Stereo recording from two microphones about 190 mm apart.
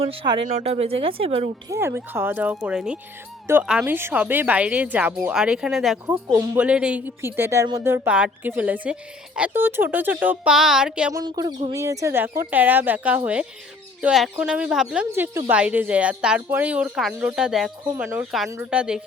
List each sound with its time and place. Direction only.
0.0 s speech: 30° right (ahead or behind)
1.7 s speech: 10° right (ahead or behind)
11.1 s a woman's voice: 20° right (ahead or behind); by 19.0 s 5° right (ahead or behind)